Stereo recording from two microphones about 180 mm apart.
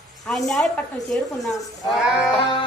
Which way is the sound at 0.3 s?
Centre (ahead or behind).